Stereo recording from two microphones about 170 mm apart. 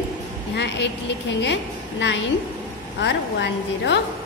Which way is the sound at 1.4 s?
90° left.